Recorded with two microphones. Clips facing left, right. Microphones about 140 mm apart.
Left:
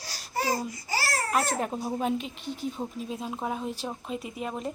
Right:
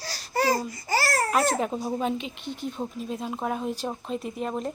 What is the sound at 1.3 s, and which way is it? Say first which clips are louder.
Speech: right 1 dB; centre (ahead or behind).